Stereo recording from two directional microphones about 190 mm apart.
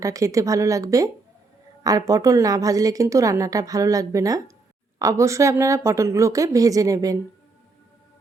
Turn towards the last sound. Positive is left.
turn(degrees=-20)  # may be behind; listen again after turning